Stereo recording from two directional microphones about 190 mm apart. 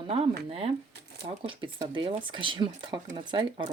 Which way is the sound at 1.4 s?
25° right (ahead or behind).